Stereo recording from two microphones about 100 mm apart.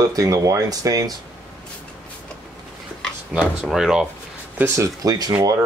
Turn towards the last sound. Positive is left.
turn(degrees=-35)  # may be behind; listen again after turning